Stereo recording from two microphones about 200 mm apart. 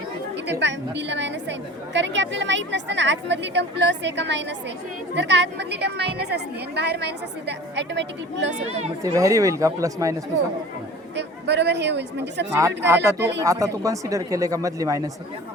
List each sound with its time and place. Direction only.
0.6 s a woman's voice: 60° right (ahead or behind)
8.5 s speech: 30° right (ahead or behind)
9.0 s speech: 15° right (ahead or behind)
11.1 s speech: 60° right (ahead or behind)
12.5 s speech: 15° right (ahead or behind)